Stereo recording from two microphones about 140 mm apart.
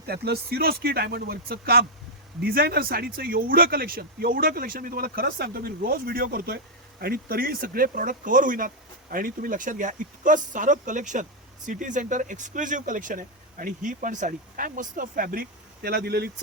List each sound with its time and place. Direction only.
0.1 s speech: 90° right